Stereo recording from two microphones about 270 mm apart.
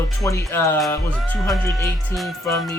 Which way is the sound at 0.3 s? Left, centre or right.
Centre.